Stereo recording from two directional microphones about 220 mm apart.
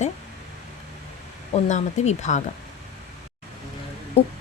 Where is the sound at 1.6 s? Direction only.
30° left (ahead or behind).